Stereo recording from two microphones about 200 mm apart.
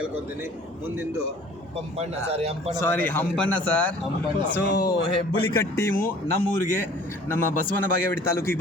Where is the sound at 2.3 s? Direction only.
30° right (ahead or behind).